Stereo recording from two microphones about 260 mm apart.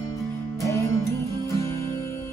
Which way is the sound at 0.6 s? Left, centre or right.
Centre.